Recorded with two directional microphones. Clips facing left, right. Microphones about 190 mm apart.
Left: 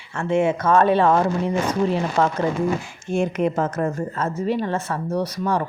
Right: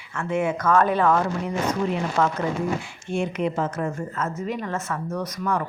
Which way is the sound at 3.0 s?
45° left (ahead or behind).